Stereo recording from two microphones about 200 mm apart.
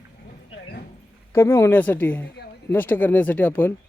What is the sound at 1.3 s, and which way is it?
Speech, 15° left (ahead or behind).